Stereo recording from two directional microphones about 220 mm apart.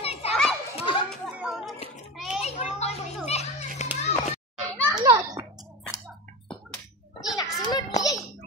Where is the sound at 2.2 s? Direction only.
Centre (ahead or behind).